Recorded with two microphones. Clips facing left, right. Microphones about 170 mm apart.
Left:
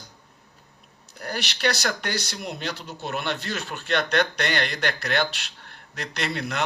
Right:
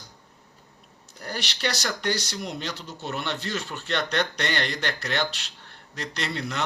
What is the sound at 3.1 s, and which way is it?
A man's voice, 60° left (ahead or behind).